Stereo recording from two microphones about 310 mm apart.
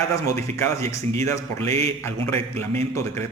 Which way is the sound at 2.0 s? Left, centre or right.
Centre.